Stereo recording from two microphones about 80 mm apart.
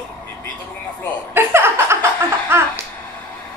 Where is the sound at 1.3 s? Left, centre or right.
Right.